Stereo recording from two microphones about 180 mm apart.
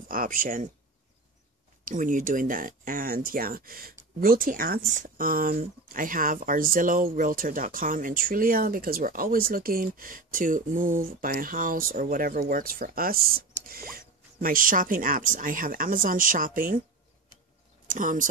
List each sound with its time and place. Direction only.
0.1 s speech: 50° right (ahead or behind)
1.9 s speech: 45° right (ahead or behind)
17.8 s speech: 45° right (ahead or behind)